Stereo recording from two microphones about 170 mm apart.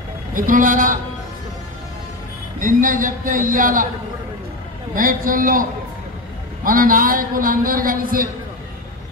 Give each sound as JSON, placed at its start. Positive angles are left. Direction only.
{"t": 0.3, "sound": "a man's voice", "side_deg": -50}
{"t": 2.6, "sound": "a man's voice", "side_deg": -50}
{"t": 4.9, "sound": "a man's voice", "side_deg": -55}